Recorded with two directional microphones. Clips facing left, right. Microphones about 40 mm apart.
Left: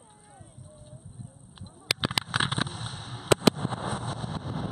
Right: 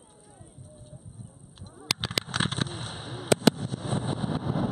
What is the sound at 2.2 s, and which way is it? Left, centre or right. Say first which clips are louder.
Vehicle: left 1 dB; centre.